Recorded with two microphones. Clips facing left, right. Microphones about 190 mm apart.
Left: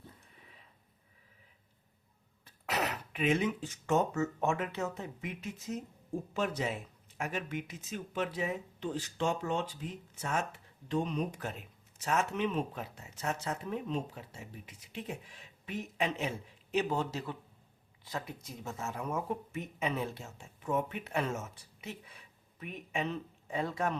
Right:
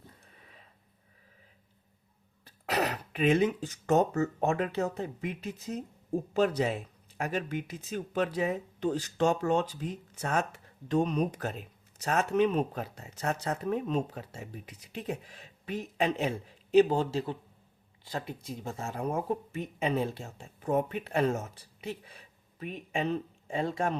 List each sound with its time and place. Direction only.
2.4 s throat clearing: 35° right (ahead or behind)
4.2 s speech: 35° right (ahead or behind)